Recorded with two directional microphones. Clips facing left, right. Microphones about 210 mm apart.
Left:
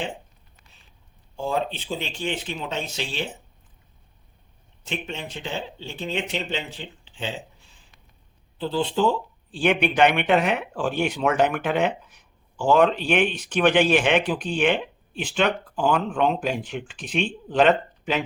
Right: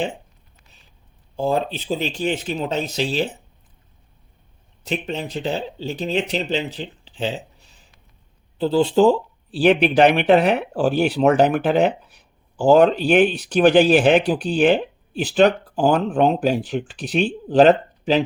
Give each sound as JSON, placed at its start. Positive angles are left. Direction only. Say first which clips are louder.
{"t": 1.4, "sound": "speech", "louder": "right 5 dB", "side_deg": -35}
{"t": 4.9, "sound": "speech", "louder": "right 6 dB", "side_deg": -40}